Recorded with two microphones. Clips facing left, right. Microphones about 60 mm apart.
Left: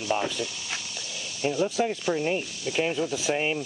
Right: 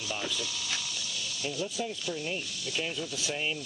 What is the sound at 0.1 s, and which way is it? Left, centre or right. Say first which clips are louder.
Speech: left 8 dB; left.